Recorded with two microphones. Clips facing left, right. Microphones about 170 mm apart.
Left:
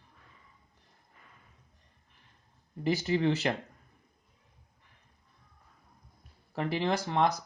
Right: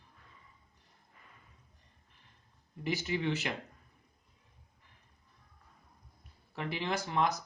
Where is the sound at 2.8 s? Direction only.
35° left (ahead or behind).